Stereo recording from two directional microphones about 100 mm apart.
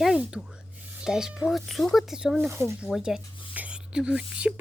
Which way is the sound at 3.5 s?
15° right (ahead or behind).